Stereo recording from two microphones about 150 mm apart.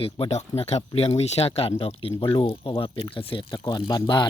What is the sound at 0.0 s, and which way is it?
Speech, 40° left (ahead or behind).